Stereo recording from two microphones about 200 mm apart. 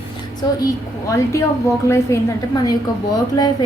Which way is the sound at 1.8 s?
15° left (ahead or behind).